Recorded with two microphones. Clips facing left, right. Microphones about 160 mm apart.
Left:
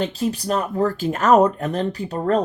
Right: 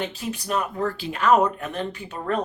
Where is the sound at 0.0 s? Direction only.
35° left (ahead or behind).